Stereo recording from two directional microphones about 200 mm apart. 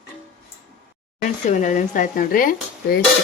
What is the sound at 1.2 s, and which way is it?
Speech, 40° left (ahead or behind).